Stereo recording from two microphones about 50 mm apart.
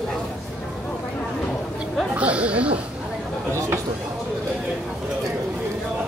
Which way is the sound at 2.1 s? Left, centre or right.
Right.